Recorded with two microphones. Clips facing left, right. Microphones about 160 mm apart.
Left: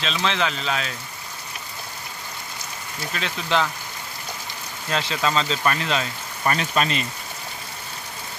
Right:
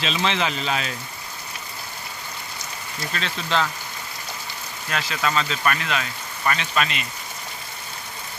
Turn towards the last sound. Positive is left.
turn(degrees=35)  # may be behind; listen again after turning